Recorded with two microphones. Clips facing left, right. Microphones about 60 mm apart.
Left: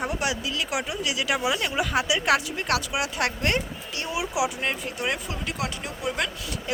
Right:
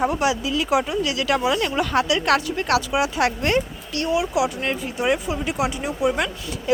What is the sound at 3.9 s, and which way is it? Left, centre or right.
Speech, centre.